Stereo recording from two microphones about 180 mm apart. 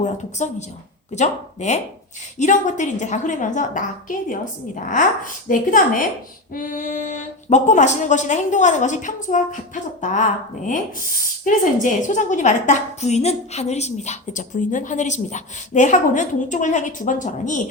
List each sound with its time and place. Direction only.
0.0 s a woman's voice: 40° left (ahead or behind)